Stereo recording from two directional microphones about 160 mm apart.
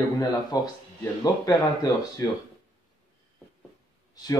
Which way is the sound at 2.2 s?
20° left (ahead or behind).